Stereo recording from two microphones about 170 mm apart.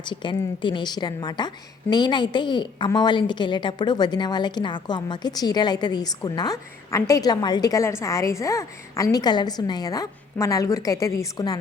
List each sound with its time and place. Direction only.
0.0 s a woman's voice: 30° left (ahead or behind)